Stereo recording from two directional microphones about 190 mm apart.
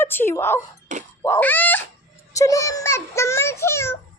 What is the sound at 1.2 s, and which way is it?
Cat, 10° left (ahead or behind).